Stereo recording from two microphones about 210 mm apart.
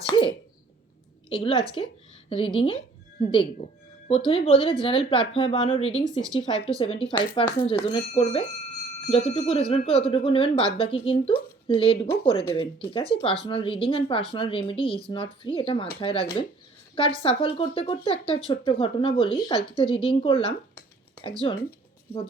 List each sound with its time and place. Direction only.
0.1 s a sound: 25° left (ahead or behind)
1.3 s speech: 25° left (ahead or behind)
6.1 s speech: 15° right (ahead or behind)
6.7 s speech: 25° left (ahead or behind)
17.2 s speech: 25° left (ahead or behind)